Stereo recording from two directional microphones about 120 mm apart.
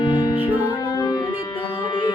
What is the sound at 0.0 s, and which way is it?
Music, 40° left (ahead or behind).